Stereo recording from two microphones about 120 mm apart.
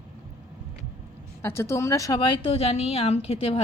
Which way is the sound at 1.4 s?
20° left (ahead or behind).